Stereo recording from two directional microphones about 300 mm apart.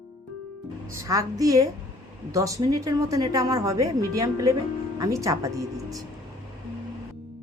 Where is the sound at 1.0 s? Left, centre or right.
Centre.